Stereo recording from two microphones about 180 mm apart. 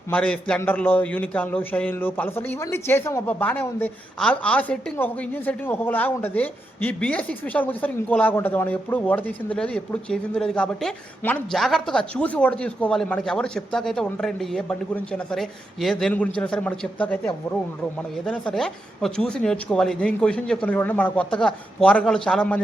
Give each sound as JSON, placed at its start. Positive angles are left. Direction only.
{"t": 0.1, "sound": "a man's voice", "side_deg": 5}